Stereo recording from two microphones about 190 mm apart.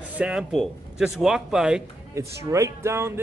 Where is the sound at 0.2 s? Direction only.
5° right (ahead or behind).